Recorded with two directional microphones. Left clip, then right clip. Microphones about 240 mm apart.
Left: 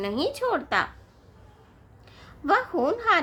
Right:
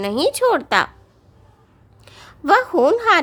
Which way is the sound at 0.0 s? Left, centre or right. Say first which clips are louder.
Right 9 dB; right.